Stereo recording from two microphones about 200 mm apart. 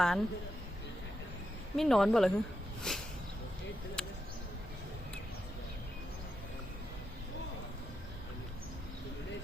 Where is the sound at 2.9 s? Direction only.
5° left (ahead or behind).